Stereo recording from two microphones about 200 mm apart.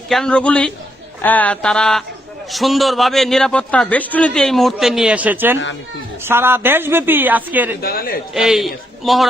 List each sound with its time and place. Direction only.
0.1 s a man's voice: 5° left (ahead or behind)
7.8 s speech: 50° left (ahead or behind)
8.3 s a man's voice: centre (ahead or behind)